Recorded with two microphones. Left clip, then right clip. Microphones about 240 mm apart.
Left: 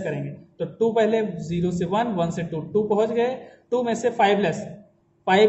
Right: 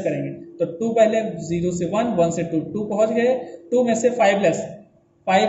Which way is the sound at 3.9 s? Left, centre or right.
Left.